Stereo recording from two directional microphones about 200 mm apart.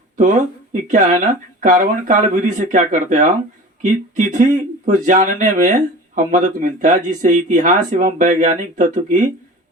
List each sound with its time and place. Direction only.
0.2 s speech: 40° right (ahead or behind)